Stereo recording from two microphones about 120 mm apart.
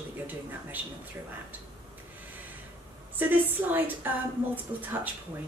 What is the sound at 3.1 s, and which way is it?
A woman's voice, 15° right (ahead or behind).